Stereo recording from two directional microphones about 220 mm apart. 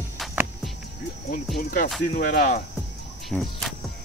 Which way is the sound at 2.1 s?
40° left (ahead or behind).